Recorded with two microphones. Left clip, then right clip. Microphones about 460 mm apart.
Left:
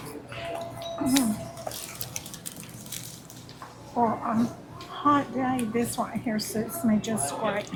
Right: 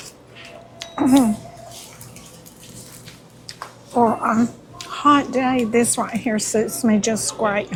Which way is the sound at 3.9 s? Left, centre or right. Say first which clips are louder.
Right 8 dB; right.